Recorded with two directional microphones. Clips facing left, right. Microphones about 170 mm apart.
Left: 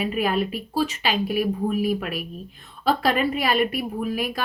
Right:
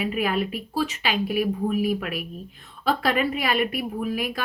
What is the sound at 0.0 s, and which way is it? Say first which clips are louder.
A woman's voice: left 1 dB; 35° left (ahead or behind).